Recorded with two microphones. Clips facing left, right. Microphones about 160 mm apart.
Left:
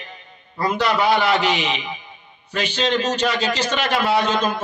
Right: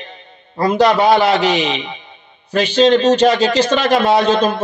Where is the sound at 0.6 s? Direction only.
35° right (ahead or behind).